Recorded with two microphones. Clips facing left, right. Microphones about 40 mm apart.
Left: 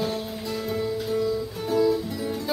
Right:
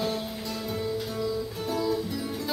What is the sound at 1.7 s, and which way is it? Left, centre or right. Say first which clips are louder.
Music: left 7 dB; centre.